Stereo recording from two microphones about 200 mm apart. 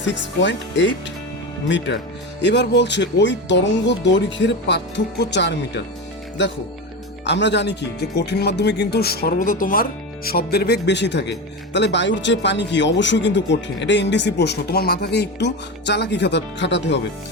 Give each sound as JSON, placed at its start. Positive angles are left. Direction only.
{"t": 0.0, "sound": "speech", "side_deg": 65}
{"t": 7.3, "sound": "speech", "side_deg": 60}